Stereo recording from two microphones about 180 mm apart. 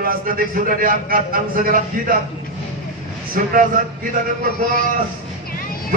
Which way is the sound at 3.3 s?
50° right (ahead or behind).